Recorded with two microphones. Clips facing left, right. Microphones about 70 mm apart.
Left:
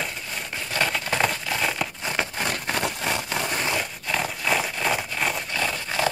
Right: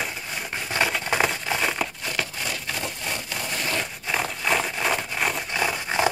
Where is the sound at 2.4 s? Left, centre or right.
Left.